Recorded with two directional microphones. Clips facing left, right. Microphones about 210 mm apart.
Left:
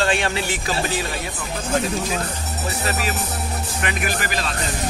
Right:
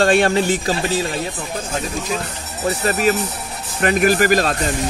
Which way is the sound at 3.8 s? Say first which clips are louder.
Right 12 dB; 45° right (ahead or behind).